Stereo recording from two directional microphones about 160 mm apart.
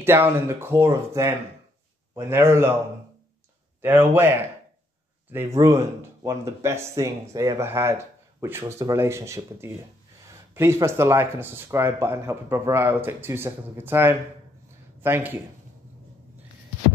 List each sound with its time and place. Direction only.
0.0 s speech: 15° right (ahead or behind)
3.8 s speech: 15° right (ahead or behind)